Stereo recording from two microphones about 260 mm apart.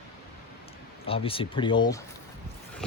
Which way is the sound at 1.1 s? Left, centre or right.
Left.